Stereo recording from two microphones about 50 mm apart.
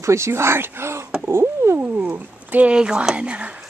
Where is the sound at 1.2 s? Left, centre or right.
Right.